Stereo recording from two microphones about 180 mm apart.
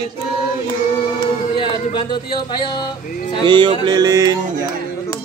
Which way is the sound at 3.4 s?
25° right (ahead or behind).